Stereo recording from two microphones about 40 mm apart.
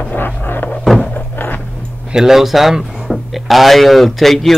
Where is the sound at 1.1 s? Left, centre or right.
Left.